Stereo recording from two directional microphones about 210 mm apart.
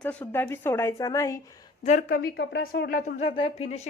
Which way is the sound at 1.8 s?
40° left (ahead or behind).